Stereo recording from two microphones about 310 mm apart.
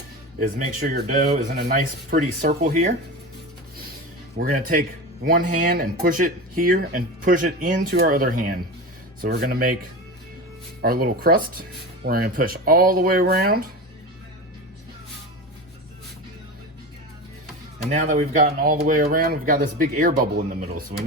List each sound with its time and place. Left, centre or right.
0.3 s speech: right
4.4 s speech: right
10.8 s speech: right
17.9 s speech: right